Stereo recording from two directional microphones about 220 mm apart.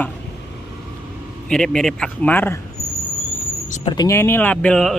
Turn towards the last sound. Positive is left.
turn(degrees=5)  # may be behind; listen again after turning